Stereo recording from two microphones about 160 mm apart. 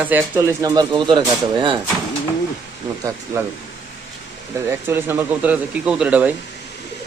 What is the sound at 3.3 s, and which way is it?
Speech, 20° right (ahead or behind).